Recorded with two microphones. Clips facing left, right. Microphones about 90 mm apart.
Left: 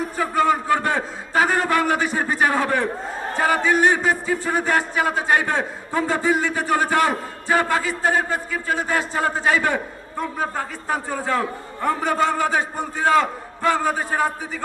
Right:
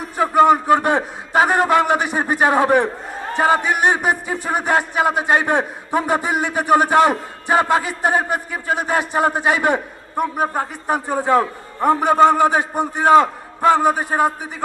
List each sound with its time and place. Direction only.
0.2 s a man's voice: 20° right (ahead or behind)